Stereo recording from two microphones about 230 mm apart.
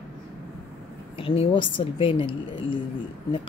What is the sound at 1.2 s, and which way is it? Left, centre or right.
A woman's voice, left.